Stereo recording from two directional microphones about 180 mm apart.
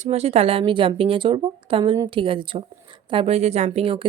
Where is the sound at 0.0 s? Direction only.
35° right (ahead or behind).